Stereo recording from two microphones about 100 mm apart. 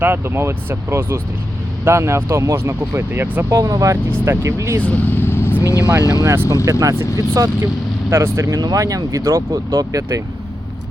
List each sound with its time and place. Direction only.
0.0 s speech: 25° right (ahead or behind)
3.5 s speech: 35° right (ahead or behind)
4.8 s speech: 15° left (ahead or behind); by 6.2 s 35° left (ahead or behind)
6.2 s speech: 25° right (ahead or behind)